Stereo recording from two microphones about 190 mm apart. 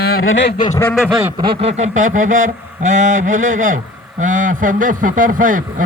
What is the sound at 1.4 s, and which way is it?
Speech, 30° right (ahead or behind).